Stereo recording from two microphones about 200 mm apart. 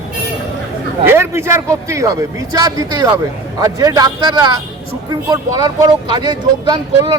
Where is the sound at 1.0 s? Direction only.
10° right (ahead or behind).